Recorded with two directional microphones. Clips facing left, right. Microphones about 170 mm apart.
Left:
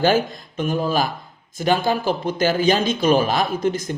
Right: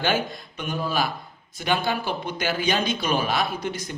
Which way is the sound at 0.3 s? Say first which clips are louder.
Left 8 dB; 45° left (ahead or behind).